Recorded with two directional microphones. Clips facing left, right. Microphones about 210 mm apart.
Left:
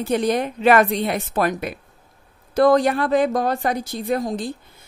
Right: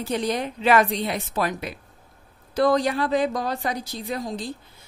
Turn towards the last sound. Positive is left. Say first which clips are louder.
# left 6 dB
turn(degrees=50)  # may be behind; listen again after turning